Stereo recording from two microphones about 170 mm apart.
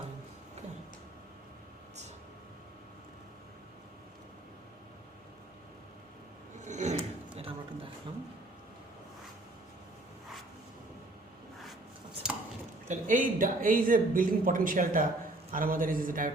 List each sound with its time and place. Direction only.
6.7 s a sound: 45° right (ahead or behind)
12.2 s squish: 5° right (ahead or behind)
12.9 s speech: 50° right (ahead or behind)